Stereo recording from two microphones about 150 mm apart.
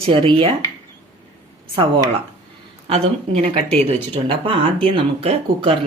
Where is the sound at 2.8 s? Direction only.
40° right (ahead or behind).